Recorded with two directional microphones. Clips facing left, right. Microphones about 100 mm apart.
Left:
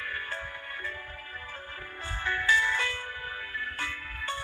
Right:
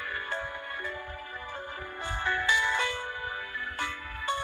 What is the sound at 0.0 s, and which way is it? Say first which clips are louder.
Music: right 2 dB; 20° right (ahead or behind).